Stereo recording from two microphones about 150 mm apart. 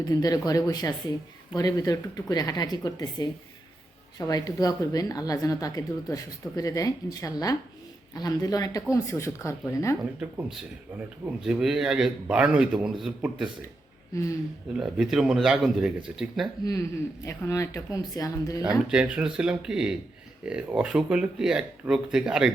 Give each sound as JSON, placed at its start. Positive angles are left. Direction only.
{"t": 0.0, "sound": "speech", "side_deg": 25}
{"t": 10.0, "sound": "speech", "side_deg": -10}
{"t": 11.4, "sound": "speech", "side_deg": -5}
{"t": 14.8, "sound": "speech", "side_deg": 0}
{"t": 17.2, "sound": "speech", "side_deg": 20}
{"t": 18.9, "sound": "speech", "side_deg": -5}